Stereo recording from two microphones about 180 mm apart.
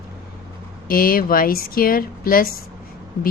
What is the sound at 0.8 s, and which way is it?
Speech, 55° left (ahead or behind).